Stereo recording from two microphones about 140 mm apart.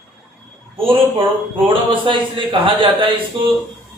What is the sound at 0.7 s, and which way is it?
Speech, 40° right (ahead or behind).